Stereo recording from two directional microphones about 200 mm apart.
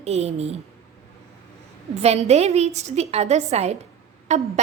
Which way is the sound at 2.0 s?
30° right (ahead or behind).